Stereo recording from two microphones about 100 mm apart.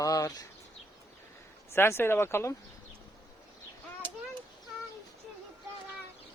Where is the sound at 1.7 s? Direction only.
25° left (ahead or behind).